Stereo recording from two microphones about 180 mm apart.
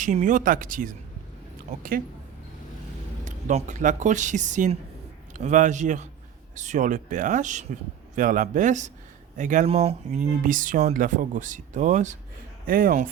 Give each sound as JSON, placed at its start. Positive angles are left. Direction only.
{"t": 0.0, "sound": "speech", "side_deg": -45}
{"t": 3.2, "sound": "speech", "side_deg": -45}